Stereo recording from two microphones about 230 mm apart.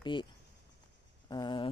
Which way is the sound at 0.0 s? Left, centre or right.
Centre.